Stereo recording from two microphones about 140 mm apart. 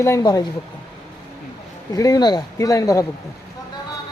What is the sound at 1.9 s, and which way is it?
Speech, 25° left (ahead or behind).